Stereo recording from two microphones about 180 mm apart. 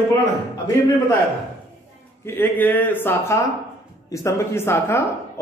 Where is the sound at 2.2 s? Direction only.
15° left (ahead or behind).